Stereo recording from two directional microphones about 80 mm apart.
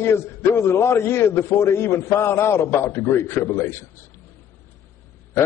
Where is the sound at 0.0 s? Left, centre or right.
Left.